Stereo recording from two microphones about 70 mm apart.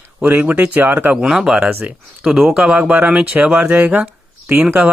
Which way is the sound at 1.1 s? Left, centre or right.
Centre.